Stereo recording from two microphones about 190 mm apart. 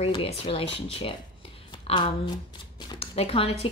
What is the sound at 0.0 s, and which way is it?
A woman's voice, 30° left (ahead or behind).